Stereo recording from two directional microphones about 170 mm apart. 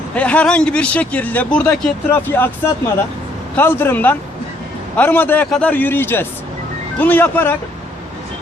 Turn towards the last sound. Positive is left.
turn(degrees=10)  # may be behind; listen again after turning